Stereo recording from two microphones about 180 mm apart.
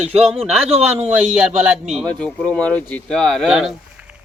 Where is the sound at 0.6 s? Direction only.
35° right (ahead or behind).